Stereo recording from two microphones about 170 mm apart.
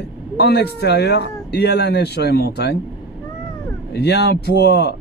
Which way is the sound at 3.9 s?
75° left (ahead or behind).